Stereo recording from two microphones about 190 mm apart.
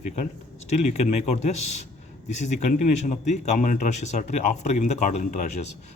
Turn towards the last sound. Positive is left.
turn(degrees=40)  # may be behind; listen again after turning